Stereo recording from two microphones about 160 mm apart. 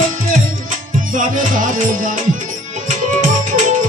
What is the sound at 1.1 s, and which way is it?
Music, 55° right (ahead or behind).